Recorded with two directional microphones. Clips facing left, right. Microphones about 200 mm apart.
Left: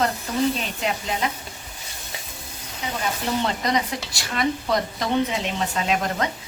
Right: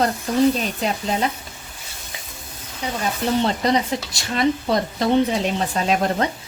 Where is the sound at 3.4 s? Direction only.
30° right (ahead or behind).